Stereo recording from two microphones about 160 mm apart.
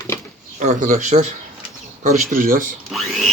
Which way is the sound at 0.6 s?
50° right (ahead or behind).